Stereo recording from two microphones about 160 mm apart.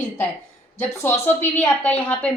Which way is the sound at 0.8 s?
15° left (ahead or behind).